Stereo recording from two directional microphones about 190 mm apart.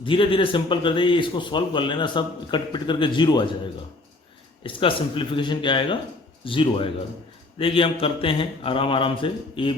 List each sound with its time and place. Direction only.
0.0 s a man's voice: 25° left (ahead or behind)
4.6 s a man's voice: 30° left (ahead or behind)